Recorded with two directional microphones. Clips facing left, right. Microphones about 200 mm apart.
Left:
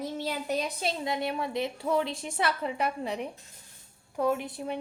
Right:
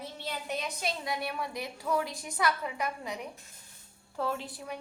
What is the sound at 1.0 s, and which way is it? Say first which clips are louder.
A woman's voice: left 4 dB; 25° left (ahead or behind).